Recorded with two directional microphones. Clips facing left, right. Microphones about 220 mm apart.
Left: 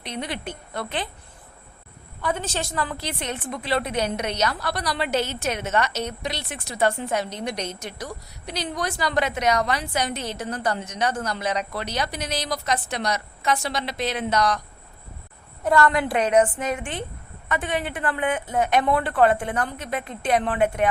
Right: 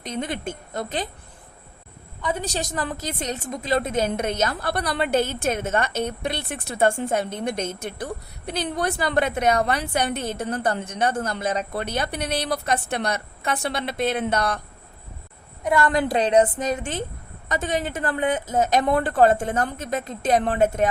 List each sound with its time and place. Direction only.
0.0 s a woman's voice: 45° right (ahead or behind)
2.4 s a woman's voice: 40° right (ahead or behind); by 14.6 s 55° right (ahead or behind)
15.9 s a woman's voice: 35° right (ahead or behind)